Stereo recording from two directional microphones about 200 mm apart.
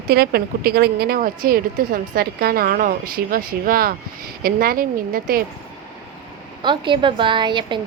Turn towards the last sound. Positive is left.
turn(degrees=-25)  # may be behind; listen again after turning